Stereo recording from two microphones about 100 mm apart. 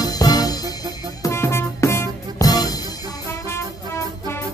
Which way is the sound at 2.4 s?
40° left (ahead or behind).